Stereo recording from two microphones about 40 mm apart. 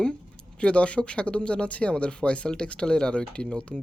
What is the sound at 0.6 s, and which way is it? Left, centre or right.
Speech, left.